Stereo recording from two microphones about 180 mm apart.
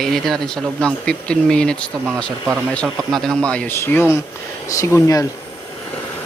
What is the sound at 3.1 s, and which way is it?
Speech, centre (ahead or behind).